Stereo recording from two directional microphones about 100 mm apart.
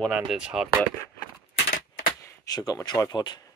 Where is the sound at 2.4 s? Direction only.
40° left (ahead or behind).